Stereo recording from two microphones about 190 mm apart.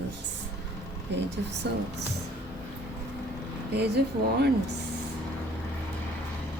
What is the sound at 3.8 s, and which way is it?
Speech, 60° right (ahead or behind).